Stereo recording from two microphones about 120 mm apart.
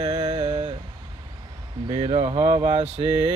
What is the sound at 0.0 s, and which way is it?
Mantra, 65° right (ahead or behind).